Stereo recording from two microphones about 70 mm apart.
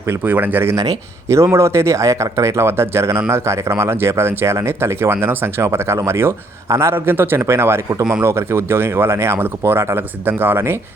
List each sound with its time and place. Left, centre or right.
0.1 s speech: right
0.8 s speech: right